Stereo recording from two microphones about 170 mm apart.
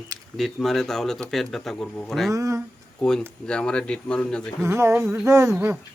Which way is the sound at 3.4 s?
5° left (ahead or behind).